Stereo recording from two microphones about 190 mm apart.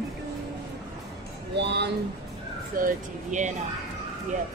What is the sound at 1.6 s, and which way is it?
Speech, 65° right (ahead or behind).